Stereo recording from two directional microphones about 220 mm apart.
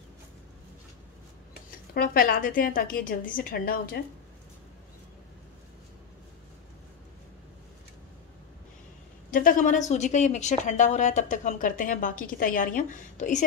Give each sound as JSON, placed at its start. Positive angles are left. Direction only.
{"t": 2.0, "sound": "a woman's voice", "side_deg": 40}
{"t": 9.3, "sound": "a woman's voice", "side_deg": 40}